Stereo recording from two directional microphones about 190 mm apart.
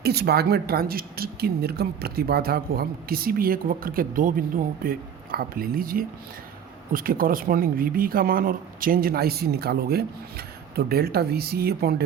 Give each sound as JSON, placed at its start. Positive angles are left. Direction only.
{"t": 0.0, "sound": "speech", "side_deg": -55}